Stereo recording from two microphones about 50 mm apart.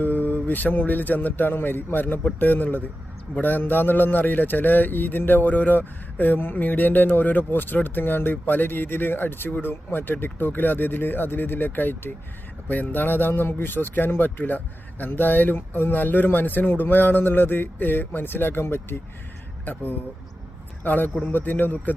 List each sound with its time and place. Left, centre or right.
0.0 s a man's voice: left